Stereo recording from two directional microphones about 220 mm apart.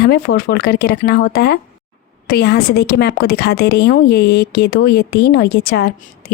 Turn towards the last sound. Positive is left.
turn(degrees=45)  # may be behind; listen again after turning